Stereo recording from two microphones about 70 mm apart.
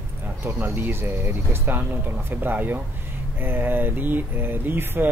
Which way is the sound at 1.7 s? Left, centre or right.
Right.